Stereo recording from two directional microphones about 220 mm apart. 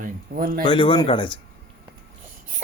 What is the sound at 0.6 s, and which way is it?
Speech, 20° left (ahead or behind).